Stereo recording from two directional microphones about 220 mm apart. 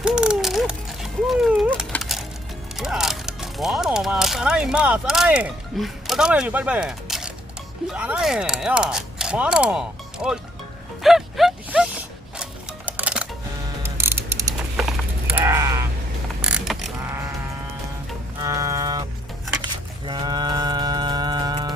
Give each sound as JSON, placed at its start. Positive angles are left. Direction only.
{"t": 0.0, "sound": "a sound", "side_deg": -5}
{"t": 2.7, "sound": "speech", "side_deg": 0}
{"t": 11.0, "sound": "a sound", "side_deg": 0}
{"t": 16.4, "sound": "crow", "side_deg": -5}
{"t": 18.4, "sound": "music", "side_deg": -15}
{"t": 20.1, "sound": "music", "side_deg": -20}